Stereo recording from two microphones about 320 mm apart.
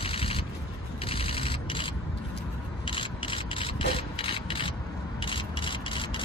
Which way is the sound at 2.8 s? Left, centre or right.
Centre.